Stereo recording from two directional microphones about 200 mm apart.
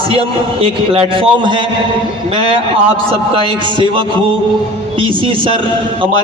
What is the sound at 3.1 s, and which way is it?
Speech, 25° right (ahead or behind).